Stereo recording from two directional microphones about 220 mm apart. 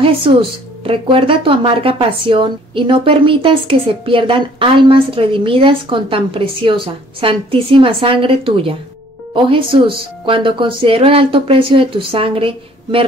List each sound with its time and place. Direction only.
0.0 s speech: 25° right (ahead or behind)